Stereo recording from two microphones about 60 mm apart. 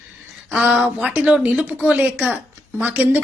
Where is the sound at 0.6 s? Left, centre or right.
Centre.